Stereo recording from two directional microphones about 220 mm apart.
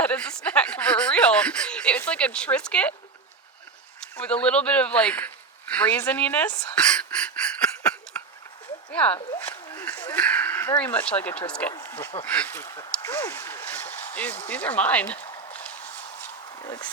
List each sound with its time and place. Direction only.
0.0 s speech: 5° left (ahead or behind)
4.0 s speech: 5° left (ahead or behind)
8.1 s a sound: 5° left (ahead or behind)
8.9 s speech: 5° left (ahead or behind)
16.6 s speech: 20° left (ahead or behind)